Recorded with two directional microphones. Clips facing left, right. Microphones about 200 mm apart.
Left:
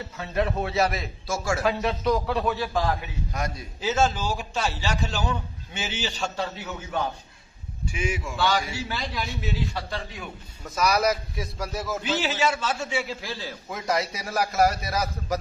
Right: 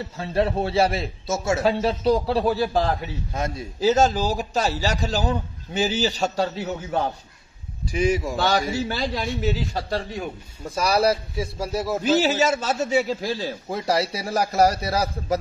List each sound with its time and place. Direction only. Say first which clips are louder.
0.2 s a man's voice: right 4 dB; 30° right (ahead or behind)
3.8 s a man's voice: right 5 dB; 40° right (ahead or behind)
12.0 s a man's voice: right 7 dB; 40° right (ahead or behind)